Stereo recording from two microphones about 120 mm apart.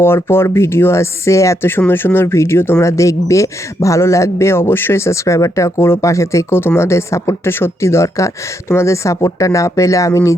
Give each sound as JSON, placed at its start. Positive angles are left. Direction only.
{"t": 0.0, "sound": "a man's voice", "side_deg": 20}